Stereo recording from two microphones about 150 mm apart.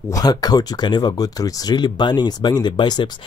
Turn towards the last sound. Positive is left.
turn(degrees=30)  # may be behind; listen again after turning